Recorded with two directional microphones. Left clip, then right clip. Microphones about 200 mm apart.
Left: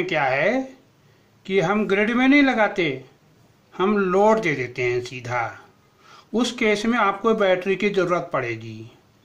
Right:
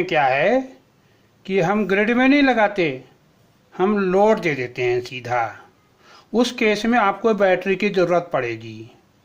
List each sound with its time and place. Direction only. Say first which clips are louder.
0.0 s speech: right 3 dB; 30° right (ahead or behind)